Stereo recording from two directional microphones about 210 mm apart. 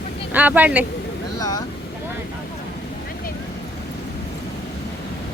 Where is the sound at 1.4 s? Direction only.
15° left (ahead or behind).